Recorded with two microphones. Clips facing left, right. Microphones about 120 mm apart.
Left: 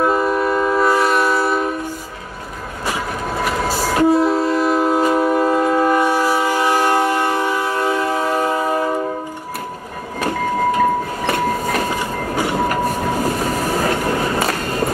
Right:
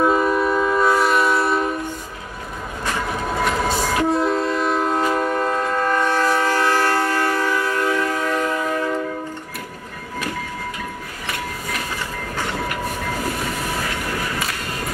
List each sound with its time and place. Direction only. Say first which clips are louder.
0.0 s train: left 1 dB; 5° left (ahead or behind)
2.9 s train: left 1 dB; 5° left (ahead or behind); by 8.9 s 30° left (ahead or behind)
10.2 s train: left 12 dB; 40° left (ahead or behind)